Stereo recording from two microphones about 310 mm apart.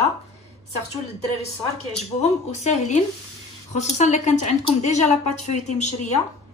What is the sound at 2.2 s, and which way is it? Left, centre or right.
Speech, left.